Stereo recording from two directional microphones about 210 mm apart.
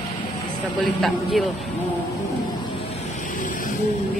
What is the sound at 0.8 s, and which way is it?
Speech, centre (ahead or behind).